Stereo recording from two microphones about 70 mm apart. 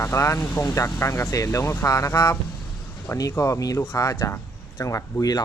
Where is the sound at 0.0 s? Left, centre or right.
Left.